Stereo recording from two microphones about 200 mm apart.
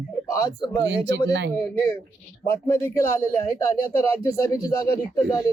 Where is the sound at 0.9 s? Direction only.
65° right (ahead or behind).